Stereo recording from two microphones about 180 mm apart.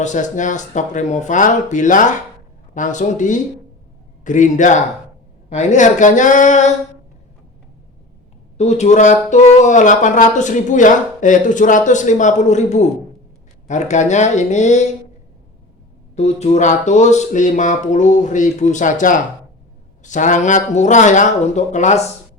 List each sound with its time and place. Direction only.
0.0 s speech: 45° left (ahead or behind)
8.5 s speech: 40° left (ahead or behind)
16.1 s speech: 35° left (ahead or behind)